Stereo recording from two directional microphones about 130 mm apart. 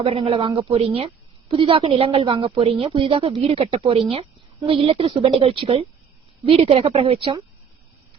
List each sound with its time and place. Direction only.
0.0 s a woman's voice: 50° right (ahead or behind)